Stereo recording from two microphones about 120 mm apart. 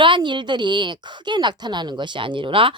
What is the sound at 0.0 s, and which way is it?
A woman's voice, 40° right (ahead or behind).